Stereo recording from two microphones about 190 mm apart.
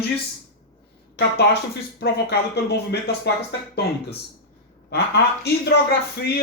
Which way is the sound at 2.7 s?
60° left (ahead or behind).